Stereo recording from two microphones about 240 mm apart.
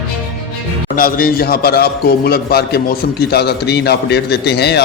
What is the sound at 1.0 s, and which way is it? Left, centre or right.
A man's voice, left.